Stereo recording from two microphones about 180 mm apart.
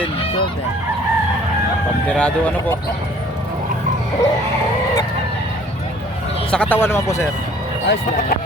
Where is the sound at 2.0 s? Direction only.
5° left (ahead or behind).